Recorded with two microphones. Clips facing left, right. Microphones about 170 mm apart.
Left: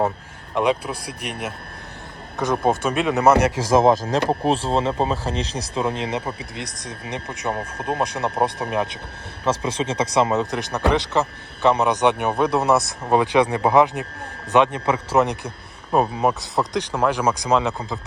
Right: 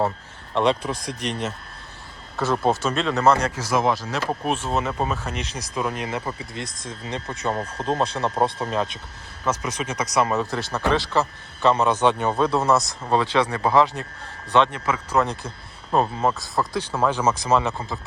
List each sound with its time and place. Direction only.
0.5 s a man's voice: 10° left (ahead or behind)
3.6 s a man's voice: 35° left (ahead or behind); by 9.0 s 15° left (ahead or behind)
9.4 s a man's voice: 30° left (ahead or behind)